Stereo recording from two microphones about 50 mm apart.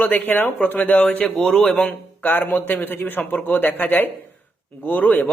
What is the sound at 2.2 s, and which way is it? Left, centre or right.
A man's voice, left.